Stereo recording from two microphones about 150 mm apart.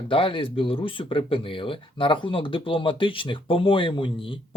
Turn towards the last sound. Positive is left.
turn(degrees=35)  # may be behind; listen again after turning